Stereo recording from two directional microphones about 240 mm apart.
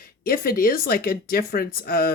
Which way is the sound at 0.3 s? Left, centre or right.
Left.